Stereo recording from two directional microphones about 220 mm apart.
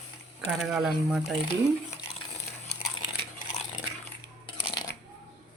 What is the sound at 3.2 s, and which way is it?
Biting, 35° left (ahead or behind).